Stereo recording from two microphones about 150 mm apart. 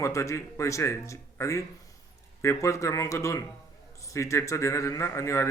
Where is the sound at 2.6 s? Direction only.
20° left (ahead or behind).